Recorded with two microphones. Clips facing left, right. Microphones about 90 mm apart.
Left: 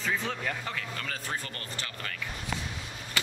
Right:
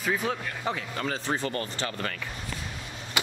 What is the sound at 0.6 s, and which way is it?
Speech, 25° right (ahead or behind).